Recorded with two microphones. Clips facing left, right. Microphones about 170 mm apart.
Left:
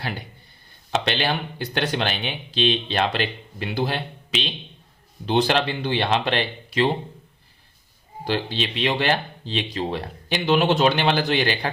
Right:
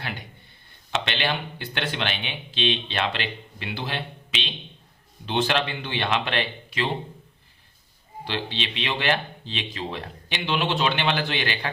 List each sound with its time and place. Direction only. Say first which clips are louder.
0.9 s speech: left 3 dB; 40° left (ahead or behind)
8.2 s speech: left 5 dB; 40° left (ahead or behind)